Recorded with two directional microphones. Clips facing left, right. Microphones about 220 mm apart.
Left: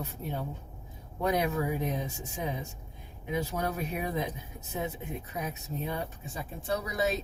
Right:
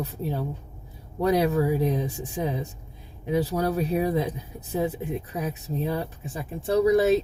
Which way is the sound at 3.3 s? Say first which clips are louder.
Right 8 dB; 35° right (ahead or behind).